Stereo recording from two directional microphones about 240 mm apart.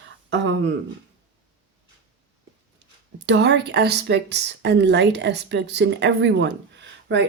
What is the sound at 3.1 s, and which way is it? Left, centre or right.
Speech, right.